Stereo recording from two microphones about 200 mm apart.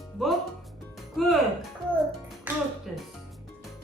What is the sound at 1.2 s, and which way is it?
Speech, centre (ahead or behind).